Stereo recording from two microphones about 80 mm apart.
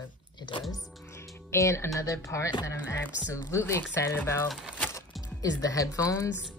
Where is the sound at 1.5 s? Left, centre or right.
Left.